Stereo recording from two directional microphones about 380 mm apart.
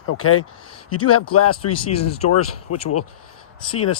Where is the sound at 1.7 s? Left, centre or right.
Centre.